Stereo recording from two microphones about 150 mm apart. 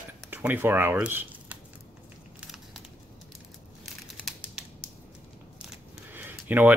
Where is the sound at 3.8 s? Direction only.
Centre (ahead or behind).